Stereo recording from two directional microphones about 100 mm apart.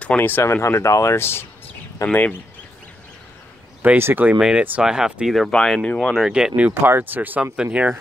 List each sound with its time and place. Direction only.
0.0 s speech: 15° left (ahead or behind)
3.8 s speech: 20° right (ahead or behind)
4.4 s speech: 10° right (ahead or behind); by 6.1 s 10° left (ahead or behind)
6.1 s speech: 5° right (ahead or behind)